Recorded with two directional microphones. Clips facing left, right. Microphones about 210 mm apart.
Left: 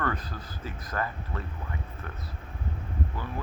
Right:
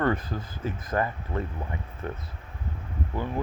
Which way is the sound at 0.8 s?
20° right (ahead or behind).